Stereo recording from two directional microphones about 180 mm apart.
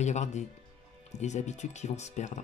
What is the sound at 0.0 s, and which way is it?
Speech, 40° left (ahead or behind).